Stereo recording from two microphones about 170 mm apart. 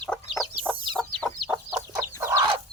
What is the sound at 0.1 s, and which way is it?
Chicken, 5° left (ahead or behind).